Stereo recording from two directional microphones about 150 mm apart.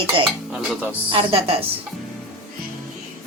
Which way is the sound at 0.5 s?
5° right (ahead or behind).